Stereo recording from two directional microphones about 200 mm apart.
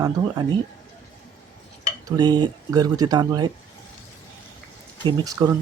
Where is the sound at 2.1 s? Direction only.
20° right (ahead or behind).